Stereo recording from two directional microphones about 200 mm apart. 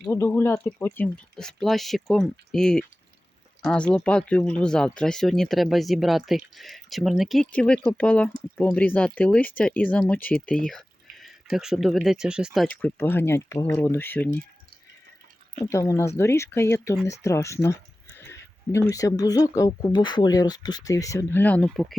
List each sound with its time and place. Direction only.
0.1 s speech: 10° left (ahead or behind)
12.6 s speech: 10° left (ahead or behind)
15.7 s speech: 15° left (ahead or behind)